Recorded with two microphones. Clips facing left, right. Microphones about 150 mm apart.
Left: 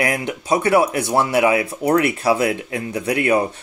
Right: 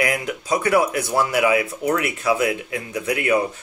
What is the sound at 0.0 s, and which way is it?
Speech, 30° left (ahead or behind).